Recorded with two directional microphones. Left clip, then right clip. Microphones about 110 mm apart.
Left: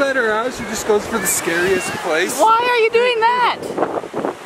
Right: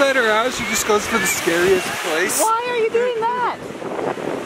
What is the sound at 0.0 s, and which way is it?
Speech, 5° right (ahead or behind).